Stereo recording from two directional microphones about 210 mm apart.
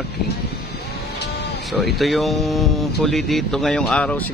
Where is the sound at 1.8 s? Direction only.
Centre (ahead or behind).